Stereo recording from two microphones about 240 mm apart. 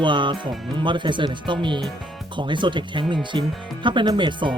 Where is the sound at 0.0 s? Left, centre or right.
Centre.